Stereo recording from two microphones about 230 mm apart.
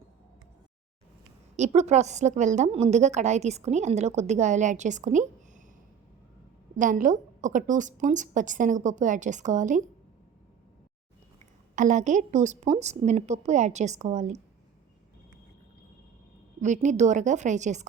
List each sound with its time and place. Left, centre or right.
1.5 s a woman's voice: right
6.7 s a woman's voice: right
11.7 s a woman's voice: right
16.6 s a woman's voice: right